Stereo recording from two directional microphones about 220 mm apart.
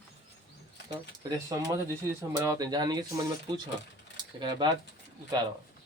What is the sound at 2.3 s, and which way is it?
A man's voice, 15° right (ahead or behind).